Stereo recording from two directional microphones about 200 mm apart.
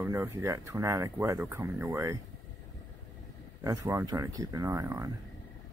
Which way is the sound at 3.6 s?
15° right (ahead or behind).